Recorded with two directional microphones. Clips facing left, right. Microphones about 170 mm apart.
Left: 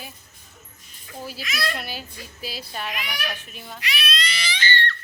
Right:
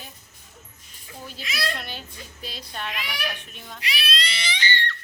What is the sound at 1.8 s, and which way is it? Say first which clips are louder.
A child's voice: left 3 dB; 5° left (ahead or behind).